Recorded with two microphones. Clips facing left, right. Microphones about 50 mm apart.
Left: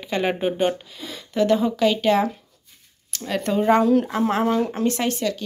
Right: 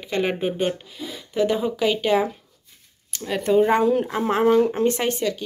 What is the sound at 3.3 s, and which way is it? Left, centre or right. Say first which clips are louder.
Speech: right 1 dB; centre.